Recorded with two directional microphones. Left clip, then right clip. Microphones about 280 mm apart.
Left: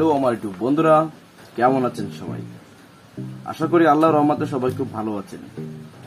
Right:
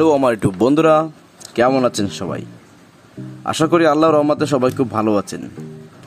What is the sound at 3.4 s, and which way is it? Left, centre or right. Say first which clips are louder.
Speech: right 3 dB; right.